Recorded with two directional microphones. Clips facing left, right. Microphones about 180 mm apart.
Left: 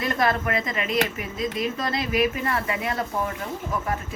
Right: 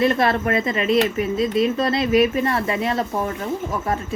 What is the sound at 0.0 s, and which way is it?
A woman's voice, 25° right (ahead or behind).